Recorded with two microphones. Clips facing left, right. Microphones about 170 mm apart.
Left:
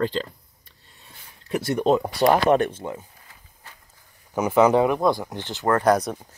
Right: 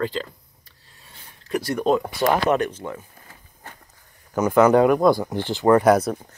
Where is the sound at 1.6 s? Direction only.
25° left (ahead or behind).